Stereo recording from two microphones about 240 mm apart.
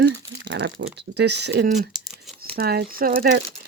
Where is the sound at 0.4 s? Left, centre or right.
Right.